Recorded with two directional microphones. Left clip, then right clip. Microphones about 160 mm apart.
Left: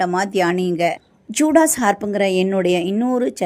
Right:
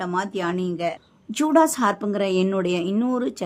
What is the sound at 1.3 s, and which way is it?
Speech, 10° left (ahead or behind).